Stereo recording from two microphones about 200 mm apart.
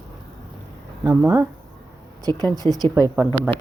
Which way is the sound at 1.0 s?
15° right (ahead or behind).